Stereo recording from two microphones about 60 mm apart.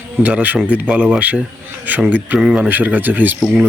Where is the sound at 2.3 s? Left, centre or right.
Centre.